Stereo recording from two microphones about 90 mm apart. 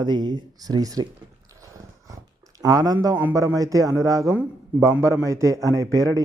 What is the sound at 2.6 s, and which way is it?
Speech, 45° right (ahead or behind).